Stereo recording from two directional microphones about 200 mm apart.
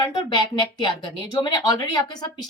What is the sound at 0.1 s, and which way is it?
A woman's voice, 20° left (ahead or behind).